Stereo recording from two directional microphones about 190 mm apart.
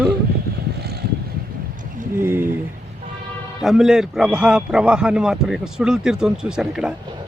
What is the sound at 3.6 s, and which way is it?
A man's voice, 5° right (ahead or behind).